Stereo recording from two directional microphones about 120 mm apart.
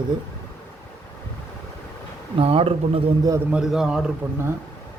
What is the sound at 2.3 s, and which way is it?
Speech, 55° right (ahead or behind).